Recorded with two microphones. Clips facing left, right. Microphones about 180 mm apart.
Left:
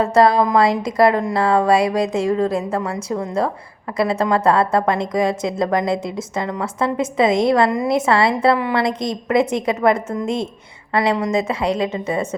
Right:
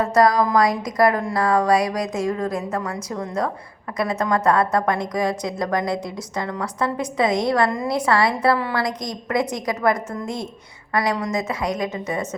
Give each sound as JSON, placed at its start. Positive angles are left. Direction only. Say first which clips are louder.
{"t": 0.0, "sound": "a woman's voice", "louder": "left 3 dB", "side_deg": 25}